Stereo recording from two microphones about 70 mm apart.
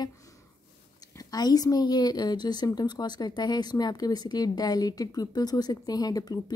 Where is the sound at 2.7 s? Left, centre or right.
Left.